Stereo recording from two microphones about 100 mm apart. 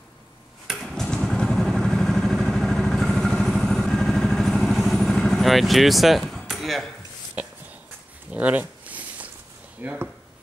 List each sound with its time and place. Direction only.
0.7 s vehicle: centre (ahead or behind)
7.4 s a sound: 15° right (ahead or behind)
9.8 s speech: 15° right (ahead or behind)